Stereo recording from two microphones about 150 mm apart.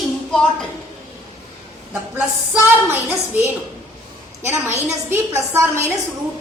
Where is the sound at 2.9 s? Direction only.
15° right (ahead or behind).